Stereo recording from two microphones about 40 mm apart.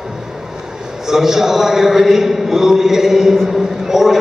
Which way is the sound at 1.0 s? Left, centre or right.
Centre.